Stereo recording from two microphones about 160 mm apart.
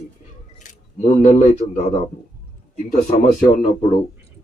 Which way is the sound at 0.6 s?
50° left (ahead or behind).